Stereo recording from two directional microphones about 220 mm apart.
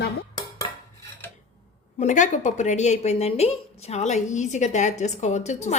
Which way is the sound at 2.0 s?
35° left (ahead or behind).